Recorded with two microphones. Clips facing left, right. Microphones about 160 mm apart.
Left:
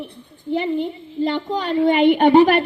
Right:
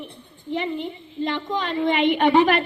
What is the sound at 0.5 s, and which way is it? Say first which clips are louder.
A woman's voice: left 5 dB; 35° left (ahead or behind).